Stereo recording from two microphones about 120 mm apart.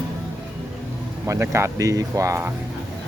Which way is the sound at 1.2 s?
25° right (ahead or behind).